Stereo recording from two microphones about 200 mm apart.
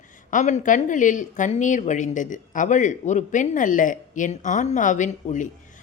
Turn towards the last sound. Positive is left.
turn(degrees=40)  # may be behind; listen again after turning